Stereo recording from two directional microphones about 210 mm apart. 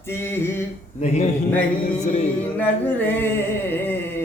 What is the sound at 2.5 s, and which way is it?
Male singing, 10° left (ahead or behind).